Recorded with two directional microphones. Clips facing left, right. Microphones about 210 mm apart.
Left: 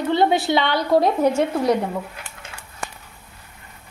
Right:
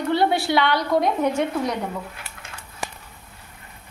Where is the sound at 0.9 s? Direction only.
35° left (ahead or behind).